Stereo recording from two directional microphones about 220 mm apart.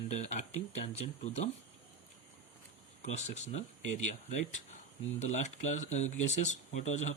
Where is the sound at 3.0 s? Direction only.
30° left (ahead or behind).